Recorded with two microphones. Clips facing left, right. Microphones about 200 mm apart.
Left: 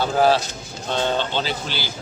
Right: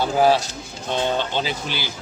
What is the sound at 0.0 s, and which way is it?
Speech, 10° right (ahead or behind).